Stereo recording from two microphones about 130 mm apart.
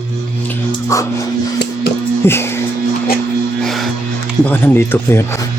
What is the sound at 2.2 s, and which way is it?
Speech, 20° left (ahead or behind).